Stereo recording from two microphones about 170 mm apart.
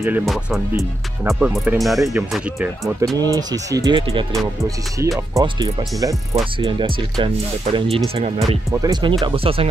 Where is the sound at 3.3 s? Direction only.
20° right (ahead or behind); by 8.4 s 40° right (ahead or behind).